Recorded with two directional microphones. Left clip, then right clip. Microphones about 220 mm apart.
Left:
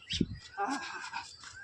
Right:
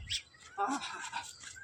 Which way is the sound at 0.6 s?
5° right (ahead or behind).